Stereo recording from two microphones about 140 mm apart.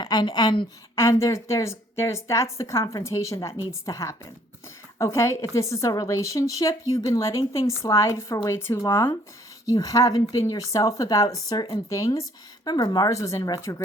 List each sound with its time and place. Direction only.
0.0 s a woman's voice: 30° left (ahead or behind)
0.9 s a woman's voice: 20° left (ahead or behind)